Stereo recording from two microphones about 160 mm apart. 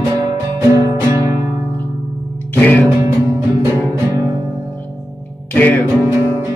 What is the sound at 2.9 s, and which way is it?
Music, 20° right (ahead or behind).